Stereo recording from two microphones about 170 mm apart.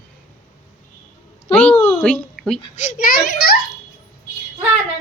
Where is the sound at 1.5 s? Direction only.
10° left (ahead or behind).